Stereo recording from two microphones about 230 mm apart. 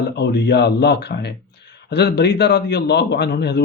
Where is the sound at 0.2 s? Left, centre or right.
Left.